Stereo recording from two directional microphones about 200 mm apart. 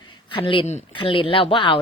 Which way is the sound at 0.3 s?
25° left (ahead or behind).